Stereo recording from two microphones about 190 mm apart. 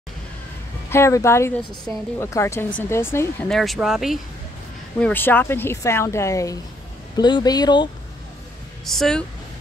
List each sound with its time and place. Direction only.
0.8 s a woman's voice: 15° left (ahead or behind); by 4.2 s centre (ahead or behind)
5.0 s a woman's voice: 10° left (ahead or behind)
8.8 s speech: centre (ahead or behind)